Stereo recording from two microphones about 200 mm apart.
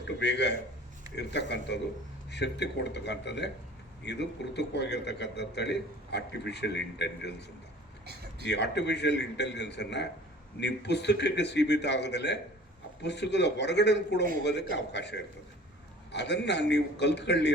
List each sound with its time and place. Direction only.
0.2 s a man's voice: 60° left (ahead or behind)
8.4 s a man's voice: 60° left (ahead or behind)